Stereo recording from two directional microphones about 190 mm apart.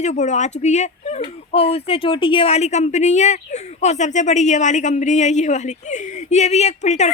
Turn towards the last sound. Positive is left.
turn(degrees=35)  # may be behind; listen again after turning